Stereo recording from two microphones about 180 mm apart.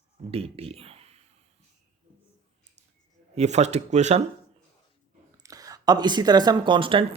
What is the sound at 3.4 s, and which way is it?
Speech, 35° right (ahead or behind).